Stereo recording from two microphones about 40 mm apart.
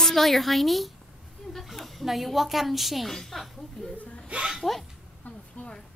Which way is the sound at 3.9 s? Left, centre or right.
Left.